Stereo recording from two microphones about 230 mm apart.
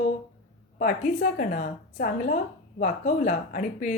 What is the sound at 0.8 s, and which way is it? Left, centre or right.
A woman's voice, left.